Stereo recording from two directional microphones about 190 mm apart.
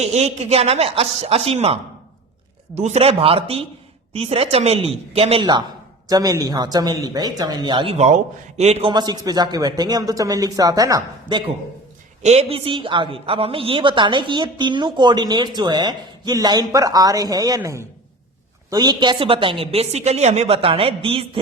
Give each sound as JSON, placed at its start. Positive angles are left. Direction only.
{"t": 0.0, "sound": "a woman's voice", "side_deg": -35}